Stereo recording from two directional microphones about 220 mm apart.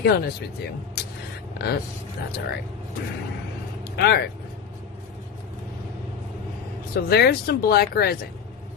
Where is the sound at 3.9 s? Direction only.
45° left (ahead or behind).